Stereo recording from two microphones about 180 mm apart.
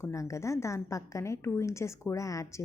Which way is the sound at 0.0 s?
15° left (ahead or behind).